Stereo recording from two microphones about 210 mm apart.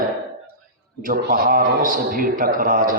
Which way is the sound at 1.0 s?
40° right (ahead or behind).